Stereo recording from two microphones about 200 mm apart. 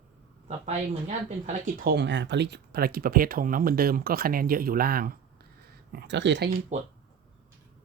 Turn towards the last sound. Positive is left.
turn(degrees=-35)  # may be behind; listen again after turning